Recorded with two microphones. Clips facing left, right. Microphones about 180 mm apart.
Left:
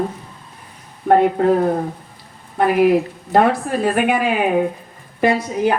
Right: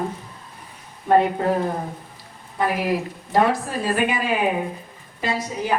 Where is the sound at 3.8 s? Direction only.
60° left (ahead or behind).